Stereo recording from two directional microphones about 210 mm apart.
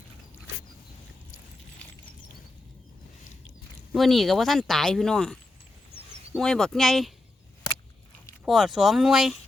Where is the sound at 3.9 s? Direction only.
Centre (ahead or behind).